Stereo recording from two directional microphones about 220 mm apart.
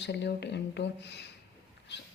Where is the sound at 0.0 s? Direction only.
50° left (ahead or behind).